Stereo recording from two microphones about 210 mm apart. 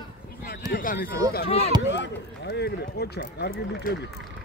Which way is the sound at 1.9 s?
55° left (ahead or behind).